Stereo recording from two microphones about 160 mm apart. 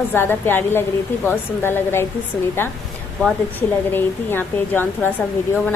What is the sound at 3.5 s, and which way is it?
A woman's voice, 10° left (ahead or behind).